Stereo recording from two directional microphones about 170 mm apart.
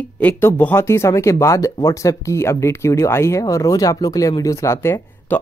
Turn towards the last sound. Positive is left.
turn(degrees=15)  # may be behind; listen again after turning